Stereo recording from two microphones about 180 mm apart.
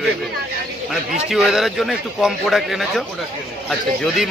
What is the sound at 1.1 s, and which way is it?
Speech, centre (ahead or behind).